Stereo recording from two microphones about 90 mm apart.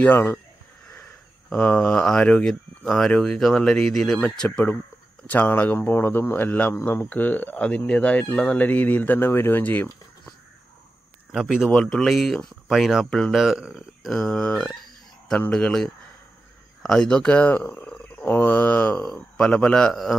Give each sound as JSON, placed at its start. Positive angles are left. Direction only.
{"t": 0.0, "sound": "speech", "side_deg": 20}
{"t": 1.5, "sound": "speech", "side_deg": 10}
{"t": 11.3, "sound": "speech", "side_deg": -5}
{"t": 13.4, "sound": "speech", "side_deg": -5}
{"t": 14.0, "sound": "speech", "side_deg": 5}
{"t": 19.0, "sound": "speech", "side_deg": 10}